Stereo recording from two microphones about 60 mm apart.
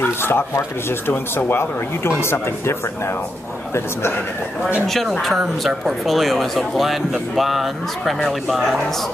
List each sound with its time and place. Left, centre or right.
0.0 s speech: left
6.0 s speech: centre